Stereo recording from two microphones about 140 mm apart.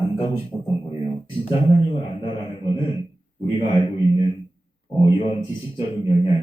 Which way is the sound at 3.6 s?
35° left (ahead or behind).